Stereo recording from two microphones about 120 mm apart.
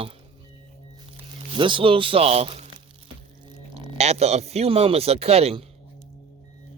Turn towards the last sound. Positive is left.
turn(degrees=-60)  # may be behind; listen again after turning